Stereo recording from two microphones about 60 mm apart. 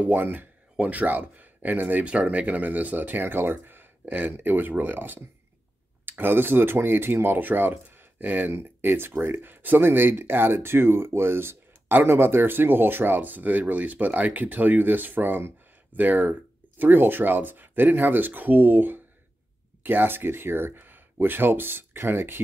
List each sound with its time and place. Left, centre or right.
0.0 s speech: right